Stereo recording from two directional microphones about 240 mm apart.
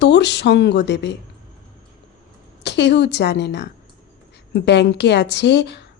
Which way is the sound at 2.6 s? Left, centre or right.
Left.